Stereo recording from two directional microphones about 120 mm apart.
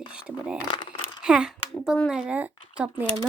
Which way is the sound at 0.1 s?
10° right (ahead or behind).